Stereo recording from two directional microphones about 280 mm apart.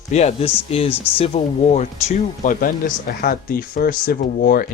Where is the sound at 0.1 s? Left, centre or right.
Left.